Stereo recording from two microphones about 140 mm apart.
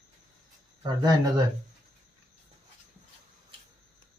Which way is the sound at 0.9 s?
30° right (ahead or behind).